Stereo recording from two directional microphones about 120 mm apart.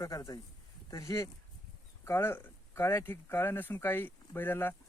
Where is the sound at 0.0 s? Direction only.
30° left (ahead or behind).